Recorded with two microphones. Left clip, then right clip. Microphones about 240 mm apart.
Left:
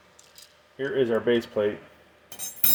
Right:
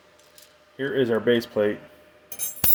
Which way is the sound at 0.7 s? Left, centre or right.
Right.